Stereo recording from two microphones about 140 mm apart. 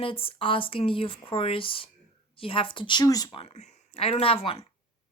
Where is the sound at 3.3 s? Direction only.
45° left (ahead or behind).